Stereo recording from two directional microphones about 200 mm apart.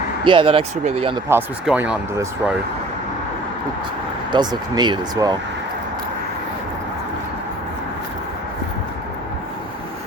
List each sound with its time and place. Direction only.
0.3 s speech: 25° right (ahead or behind)
1.3 s speech: 10° right (ahead or behind)
4.3 s speech: 20° right (ahead or behind)